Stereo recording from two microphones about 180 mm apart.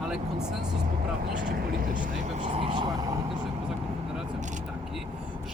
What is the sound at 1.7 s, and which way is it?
Speech, 50° right (ahead or behind).